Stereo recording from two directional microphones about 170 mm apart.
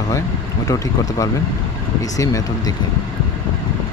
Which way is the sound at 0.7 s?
20° left (ahead or behind).